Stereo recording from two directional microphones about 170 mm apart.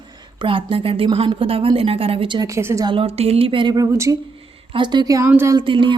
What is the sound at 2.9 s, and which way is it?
A woman's voice, 35° right (ahead or behind).